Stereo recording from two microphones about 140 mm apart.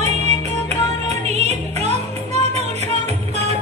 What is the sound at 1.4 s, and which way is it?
Music, 50° right (ahead or behind).